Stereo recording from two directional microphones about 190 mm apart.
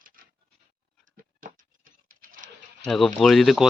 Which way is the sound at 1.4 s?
45° right (ahead or behind).